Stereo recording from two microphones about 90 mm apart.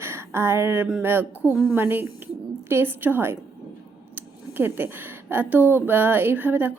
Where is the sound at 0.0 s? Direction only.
25° right (ahead or behind).